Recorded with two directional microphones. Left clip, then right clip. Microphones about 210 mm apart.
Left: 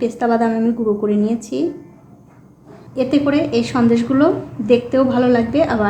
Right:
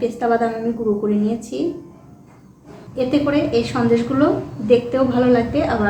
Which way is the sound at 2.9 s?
40° left (ahead or behind).